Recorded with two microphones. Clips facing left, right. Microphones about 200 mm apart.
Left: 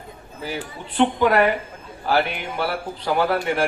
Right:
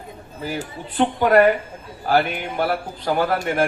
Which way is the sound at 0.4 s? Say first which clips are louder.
Right 2 dB; 45° right (ahead or behind).